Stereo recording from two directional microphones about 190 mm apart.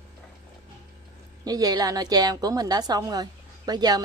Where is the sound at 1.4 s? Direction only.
20° right (ahead or behind).